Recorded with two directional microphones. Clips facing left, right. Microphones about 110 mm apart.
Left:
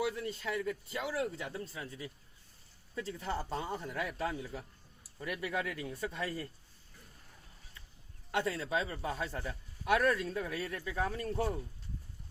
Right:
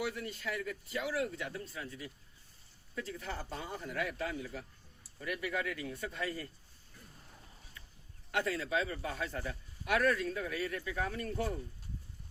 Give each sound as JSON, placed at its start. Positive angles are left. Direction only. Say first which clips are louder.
{"t": 0.0, "sound": "a man's voice", "louder": "left 3 dB", "side_deg": 25}
{"t": 2.9, "sound": "a man's voice", "louder": "left 3 dB", "side_deg": 25}
{"t": 8.3, "sound": "a man's voice", "louder": "even", "side_deg": 25}